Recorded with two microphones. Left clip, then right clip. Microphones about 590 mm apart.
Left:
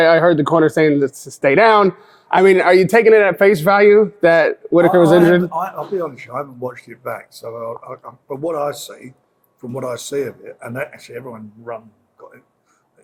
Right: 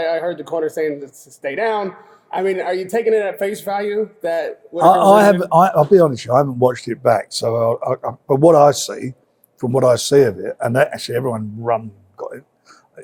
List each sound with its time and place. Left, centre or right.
0.0 s speech: left
5.5 s speech: right